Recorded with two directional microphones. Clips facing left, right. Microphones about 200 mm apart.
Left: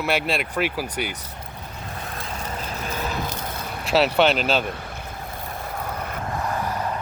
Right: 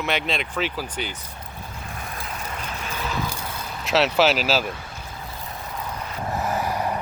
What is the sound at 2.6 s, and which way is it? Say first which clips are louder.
Vehicle: left 4 dB; 35° left (ahead or behind).